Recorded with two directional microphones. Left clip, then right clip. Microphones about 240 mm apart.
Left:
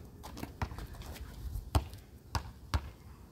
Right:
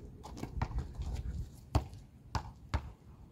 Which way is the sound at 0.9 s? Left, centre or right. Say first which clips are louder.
Left 2 dB; centre.